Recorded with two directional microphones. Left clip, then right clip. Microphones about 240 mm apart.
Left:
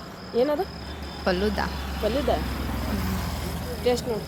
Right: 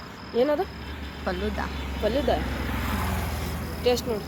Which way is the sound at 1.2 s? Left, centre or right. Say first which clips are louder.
Left 5 dB; left.